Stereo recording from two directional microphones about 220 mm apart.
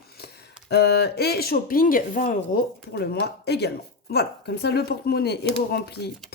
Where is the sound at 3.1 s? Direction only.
50° left (ahead or behind).